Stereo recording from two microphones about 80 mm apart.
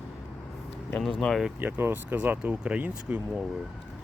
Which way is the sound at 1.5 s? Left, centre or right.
Right.